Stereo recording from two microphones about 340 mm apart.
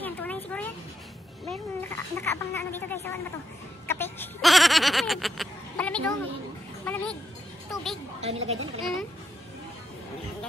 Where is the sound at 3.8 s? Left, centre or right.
Centre.